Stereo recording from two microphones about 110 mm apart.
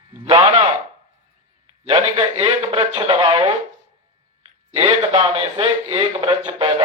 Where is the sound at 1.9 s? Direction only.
50° right (ahead or behind).